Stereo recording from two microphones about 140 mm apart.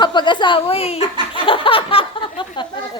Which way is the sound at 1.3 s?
40° left (ahead or behind).